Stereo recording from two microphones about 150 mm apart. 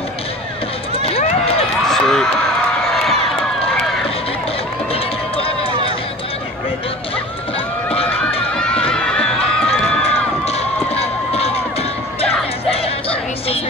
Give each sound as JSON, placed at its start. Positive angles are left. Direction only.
{"t": 1.9, "sound": "a sound", "side_deg": 5}
{"t": 4.9, "sound": "run", "side_deg": 40}
{"t": 8.5, "sound": "run", "side_deg": 5}
{"t": 9.7, "sound": "run", "side_deg": 45}
{"t": 11.0, "sound": "a sound", "side_deg": 45}
{"t": 12.7, "sound": "music", "side_deg": 40}